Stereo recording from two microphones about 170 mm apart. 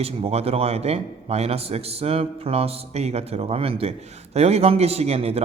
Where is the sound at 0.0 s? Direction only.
35° right (ahead or behind).